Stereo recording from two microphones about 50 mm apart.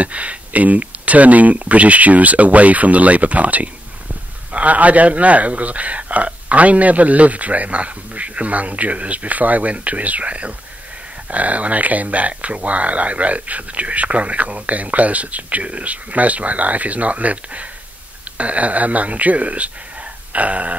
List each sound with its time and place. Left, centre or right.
0.0 s speech: right